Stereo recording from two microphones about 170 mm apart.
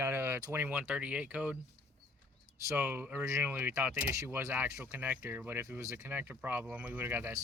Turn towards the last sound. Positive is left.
turn(degrees=-15)  # may be behind; listen again after turning